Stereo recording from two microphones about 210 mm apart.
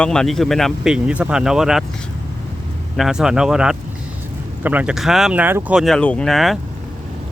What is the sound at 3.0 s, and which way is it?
Speech, 5° right (ahead or behind).